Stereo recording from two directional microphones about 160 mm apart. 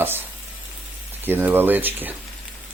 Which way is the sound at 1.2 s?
15° right (ahead or behind).